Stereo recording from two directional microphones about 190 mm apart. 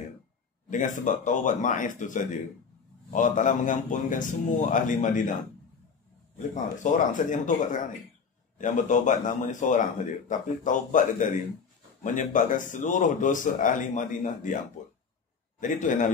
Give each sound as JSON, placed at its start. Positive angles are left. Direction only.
{"t": 0.7, "sound": "a man's voice", "side_deg": 40}
{"t": 6.3, "sound": "a man's voice", "side_deg": 40}
{"t": 15.6, "sound": "a man's voice", "side_deg": 40}